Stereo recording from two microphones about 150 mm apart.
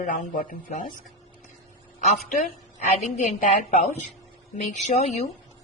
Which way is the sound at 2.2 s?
55° left (ahead or behind).